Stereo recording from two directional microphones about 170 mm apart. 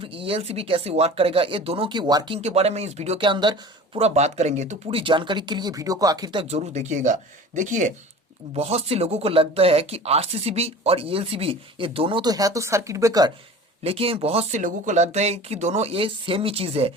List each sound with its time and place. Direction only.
0.0 s speech: 30° right (ahead or behind)
3.9 s speech: 40° right (ahead or behind); by 6.4 s 20° right (ahead or behind)
6.5 s speech: 40° right (ahead or behind)
8.5 s speech: 35° right (ahead or behind); by 13.3 s 20° right (ahead or behind)
13.8 s speech: 35° right (ahead or behind)
14.6 s speech: 45° right (ahead or behind)